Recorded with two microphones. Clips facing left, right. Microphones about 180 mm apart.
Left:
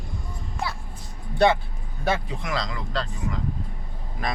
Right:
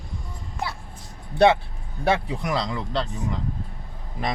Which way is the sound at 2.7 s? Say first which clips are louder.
Right 3 dB; 30° right (ahead or behind).